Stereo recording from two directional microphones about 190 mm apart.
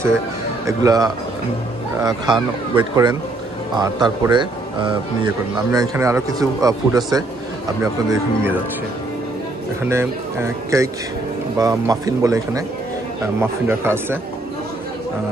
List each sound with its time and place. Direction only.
0.7 s a man's voice: 20° right (ahead or behind)
9.8 s speech: 15° right (ahead or behind)